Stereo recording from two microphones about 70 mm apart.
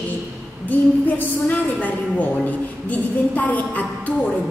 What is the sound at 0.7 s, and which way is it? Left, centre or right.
A woman's voice, left.